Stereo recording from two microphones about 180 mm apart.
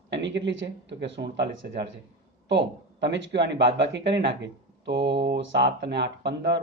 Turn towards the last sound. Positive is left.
turn(degrees=-70)  # may be behind; listen again after turning